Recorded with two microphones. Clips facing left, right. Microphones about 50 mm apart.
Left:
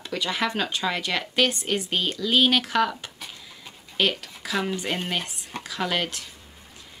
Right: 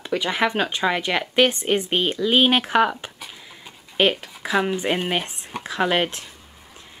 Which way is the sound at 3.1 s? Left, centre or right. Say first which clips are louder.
Right 1 dB; centre.